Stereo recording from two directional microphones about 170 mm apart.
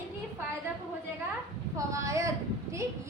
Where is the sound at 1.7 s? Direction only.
20° right (ahead or behind).